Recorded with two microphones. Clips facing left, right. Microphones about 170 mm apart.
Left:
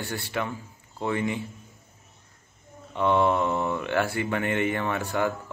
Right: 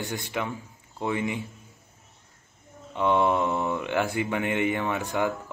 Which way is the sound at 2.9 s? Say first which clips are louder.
Even; 15° right (ahead or behind).